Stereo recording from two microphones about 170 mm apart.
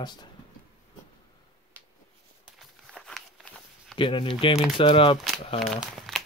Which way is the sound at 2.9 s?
5° left (ahead or behind).